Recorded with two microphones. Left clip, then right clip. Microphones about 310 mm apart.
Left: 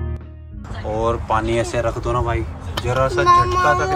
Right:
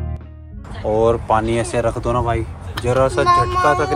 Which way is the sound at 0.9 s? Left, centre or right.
Centre.